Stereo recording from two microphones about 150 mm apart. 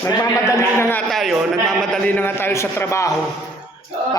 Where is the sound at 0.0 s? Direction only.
20° left (ahead or behind).